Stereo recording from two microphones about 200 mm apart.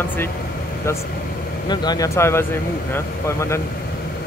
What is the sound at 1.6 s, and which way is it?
Speech, 20° left (ahead or behind).